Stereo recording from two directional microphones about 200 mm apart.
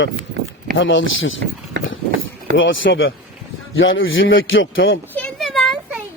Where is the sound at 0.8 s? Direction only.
70° left (ahead or behind).